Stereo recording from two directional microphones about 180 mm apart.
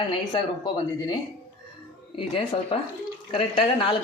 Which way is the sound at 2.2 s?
30° left (ahead or behind).